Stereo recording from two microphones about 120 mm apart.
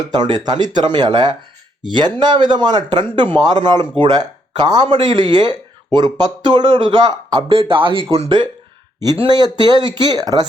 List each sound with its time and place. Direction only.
0.0 s speech: 35° right (ahead or behind)
9.1 s speech: 40° right (ahead or behind)